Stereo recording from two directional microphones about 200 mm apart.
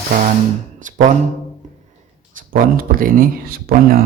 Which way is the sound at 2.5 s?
45° right (ahead or behind).